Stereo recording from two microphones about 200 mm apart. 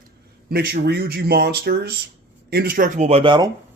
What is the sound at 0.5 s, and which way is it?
Speech, 50° right (ahead or behind).